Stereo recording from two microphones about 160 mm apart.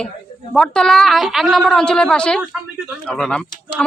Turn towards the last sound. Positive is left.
turn(degrees=5)  # may be behind; listen again after turning